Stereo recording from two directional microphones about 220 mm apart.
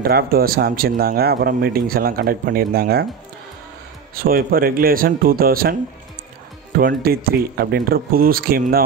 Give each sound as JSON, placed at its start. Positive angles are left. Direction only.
{"t": 0.0, "sound": "speech", "side_deg": -45}
{"t": 4.2, "sound": "speech", "side_deg": -40}
{"t": 6.8, "sound": "speech", "side_deg": -40}